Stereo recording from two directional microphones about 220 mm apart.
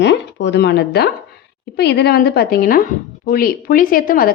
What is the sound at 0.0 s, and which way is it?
A woman's voice, 55° left (ahead or behind).